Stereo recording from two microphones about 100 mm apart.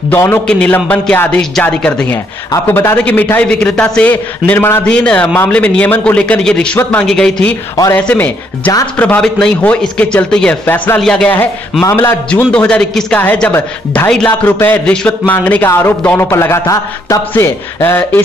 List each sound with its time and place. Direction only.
0.1 s a man's voice: 25° left (ahead or behind)
2.5 s a man's voice: 25° left (ahead or behind)
4.8 s speech: 10° left (ahead or behind)
11.8 s a man's voice: 25° left (ahead or behind)
12.3 s a man's voice: 10° left (ahead or behind)